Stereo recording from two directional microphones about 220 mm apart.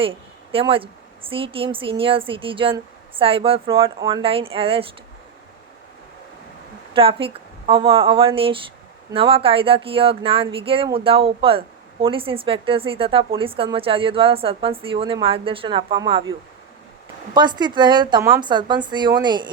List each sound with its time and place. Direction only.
0.5 s speech: 25° right (ahead or behind)
6.9 s a woman's voice: 25° right (ahead or behind)
17.3 s speech: 20° right (ahead or behind)